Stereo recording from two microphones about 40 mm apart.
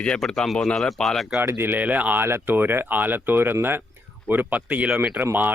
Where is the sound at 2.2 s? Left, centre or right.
Right.